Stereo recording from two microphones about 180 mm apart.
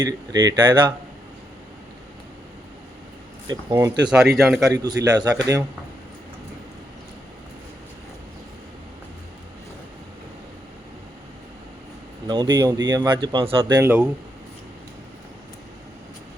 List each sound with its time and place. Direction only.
0.0 s speech: 20° right (ahead or behind)
3.4 s speech: 20° right (ahead or behind)
4.4 s a man's voice: 5° right (ahead or behind)
4.7 s speech: 20° right (ahead or behind)
12.3 s speech: 25° right (ahead or behind)